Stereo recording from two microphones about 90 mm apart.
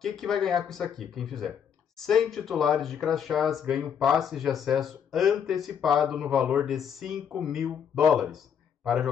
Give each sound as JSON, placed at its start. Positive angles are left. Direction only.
{"t": 0.0, "sound": "speech", "side_deg": 5}